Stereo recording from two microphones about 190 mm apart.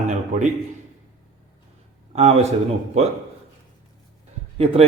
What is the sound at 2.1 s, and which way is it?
Speech, 35° right (ahead or behind).